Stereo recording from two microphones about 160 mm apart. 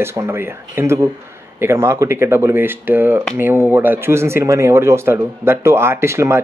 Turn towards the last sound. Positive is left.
turn(degrees=-15)  # may be behind; listen again after turning